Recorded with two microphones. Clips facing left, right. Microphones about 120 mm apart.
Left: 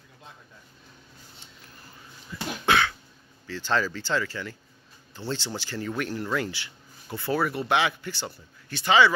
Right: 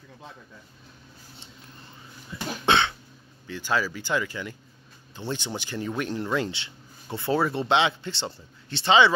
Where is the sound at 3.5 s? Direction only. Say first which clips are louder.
Even; 10° right (ahead or behind).